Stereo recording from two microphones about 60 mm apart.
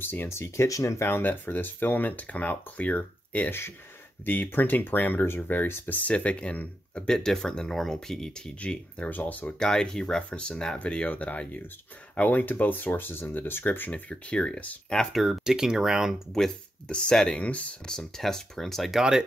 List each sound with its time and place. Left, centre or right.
0.0 s speech: left
0.3 s speech: left
0.7 s speech: left
1.0 s speech: left
5.9 s speech: left
7.1 s speech: centre
8.5 s speech: left
9.6 s speech: centre; by 14.8 s left
15.1 s speech: centre
16.8 s speech: centre
17.8 s speech: centre